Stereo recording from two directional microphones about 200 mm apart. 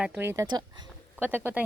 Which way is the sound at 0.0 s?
10° right (ahead or behind).